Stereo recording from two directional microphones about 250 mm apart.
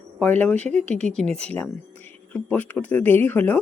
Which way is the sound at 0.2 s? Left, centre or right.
Centre.